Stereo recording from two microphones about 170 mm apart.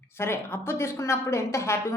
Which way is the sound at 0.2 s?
15° left (ahead or behind).